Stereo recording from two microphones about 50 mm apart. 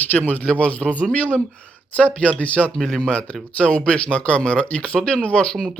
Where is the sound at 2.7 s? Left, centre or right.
Centre.